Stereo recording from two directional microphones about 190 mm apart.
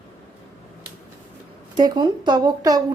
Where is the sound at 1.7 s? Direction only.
25° right (ahead or behind).